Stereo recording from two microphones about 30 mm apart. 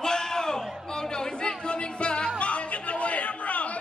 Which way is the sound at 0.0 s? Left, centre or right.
Centre.